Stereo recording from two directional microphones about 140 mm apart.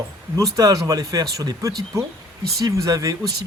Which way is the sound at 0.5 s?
25° right (ahead or behind).